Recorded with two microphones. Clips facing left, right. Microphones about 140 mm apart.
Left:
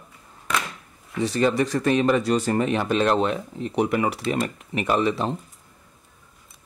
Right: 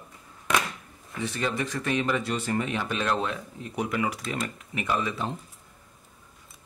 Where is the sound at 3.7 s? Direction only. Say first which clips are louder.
Left 6 dB; 65° left (ahead or behind).